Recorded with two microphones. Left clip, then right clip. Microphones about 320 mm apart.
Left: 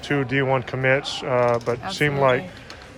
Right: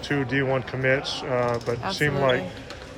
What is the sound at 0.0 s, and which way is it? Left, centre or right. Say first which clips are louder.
Speech: left 3 dB; centre.